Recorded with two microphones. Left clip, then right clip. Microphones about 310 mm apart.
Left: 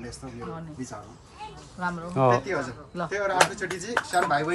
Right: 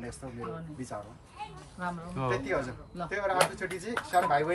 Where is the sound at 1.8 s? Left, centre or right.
Centre.